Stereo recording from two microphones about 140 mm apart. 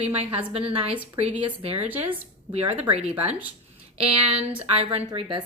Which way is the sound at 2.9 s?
50° right (ahead or behind).